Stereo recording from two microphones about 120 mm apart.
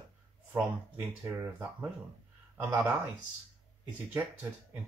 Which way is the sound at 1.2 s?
20° right (ahead or behind).